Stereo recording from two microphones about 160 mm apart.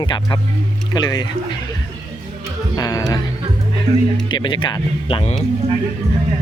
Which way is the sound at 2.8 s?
25° left (ahead or behind).